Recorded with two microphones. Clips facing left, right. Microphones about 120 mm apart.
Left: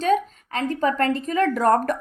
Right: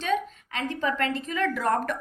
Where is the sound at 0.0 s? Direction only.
40° left (ahead or behind).